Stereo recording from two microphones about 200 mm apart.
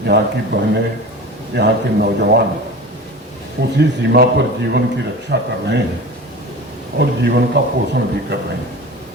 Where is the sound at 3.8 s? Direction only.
50° right (ahead or behind).